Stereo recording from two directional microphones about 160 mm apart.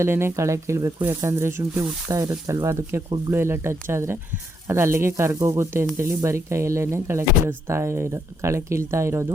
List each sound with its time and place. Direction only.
0.0 s speech: 15° right (ahead or behind)